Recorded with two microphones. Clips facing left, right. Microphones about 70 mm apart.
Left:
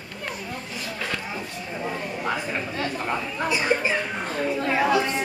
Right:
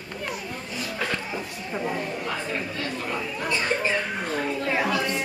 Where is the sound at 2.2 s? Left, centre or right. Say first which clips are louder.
Left 2 dB; left.